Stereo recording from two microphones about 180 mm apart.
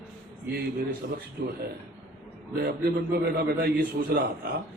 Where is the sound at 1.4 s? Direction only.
60° right (ahead or behind).